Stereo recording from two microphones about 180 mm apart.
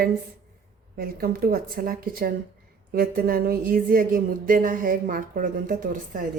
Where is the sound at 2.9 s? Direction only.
55° right (ahead or behind).